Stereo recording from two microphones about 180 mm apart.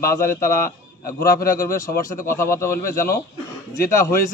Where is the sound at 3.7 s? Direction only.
15° left (ahead or behind).